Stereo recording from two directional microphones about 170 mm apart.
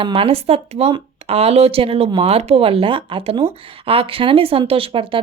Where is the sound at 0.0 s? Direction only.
35° right (ahead or behind).